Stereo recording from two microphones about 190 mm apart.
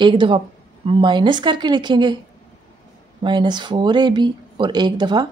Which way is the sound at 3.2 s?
25° right (ahead or behind).